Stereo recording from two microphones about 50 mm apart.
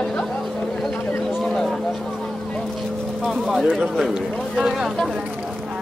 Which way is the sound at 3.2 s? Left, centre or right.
Centre.